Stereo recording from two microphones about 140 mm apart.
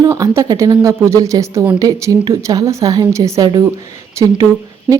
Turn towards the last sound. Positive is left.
turn(degrees=-5)  # may be behind; listen again after turning